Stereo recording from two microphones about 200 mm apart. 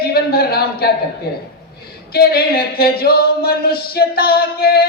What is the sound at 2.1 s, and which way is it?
Female singing, 50° left (ahead or behind).